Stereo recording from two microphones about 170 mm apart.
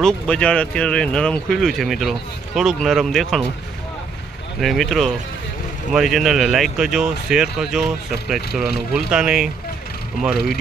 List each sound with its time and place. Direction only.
0.0 s speech: 5° left (ahead or behind)
4.6 s speech: centre (ahead or behind)